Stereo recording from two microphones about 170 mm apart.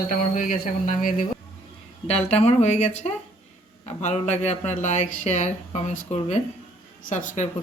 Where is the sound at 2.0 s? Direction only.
40° left (ahead or behind).